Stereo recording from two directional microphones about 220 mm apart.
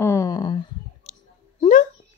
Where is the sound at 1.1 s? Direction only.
30° left (ahead or behind).